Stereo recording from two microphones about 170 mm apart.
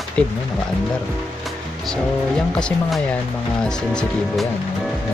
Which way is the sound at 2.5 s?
5° left (ahead or behind).